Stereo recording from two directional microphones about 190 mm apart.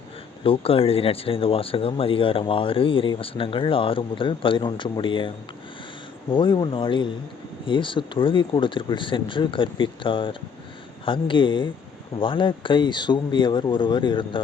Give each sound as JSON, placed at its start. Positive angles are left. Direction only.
{"t": 0.4, "sound": "speech", "side_deg": 30}
{"t": 6.3, "sound": "speech", "side_deg": 25}